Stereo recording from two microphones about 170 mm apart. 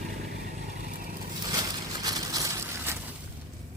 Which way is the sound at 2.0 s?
20° right (ahead or behind).